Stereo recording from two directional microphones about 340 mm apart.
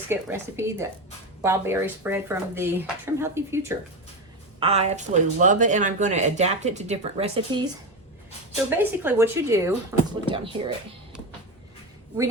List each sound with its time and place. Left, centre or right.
0.1 s speech: centre
4.6 s speech: centre
8.7 s speech: centre